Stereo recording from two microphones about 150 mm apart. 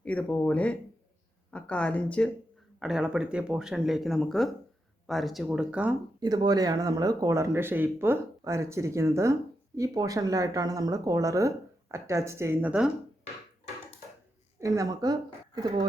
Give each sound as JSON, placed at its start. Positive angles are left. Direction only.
{"t": 0.0, "sound": "speech", "side_deg": 10}
{"t": 2.8, "sound": "speech", "side_deg": -5}
{"t": 6.1, "sound": "speech", "side_deg": -25}
{"t": 14.6, "sound": "a woman's voice", "side_deg": -25}